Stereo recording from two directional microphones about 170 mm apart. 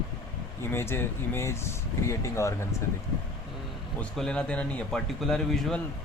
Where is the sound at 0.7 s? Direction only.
15° left (ahead or behind).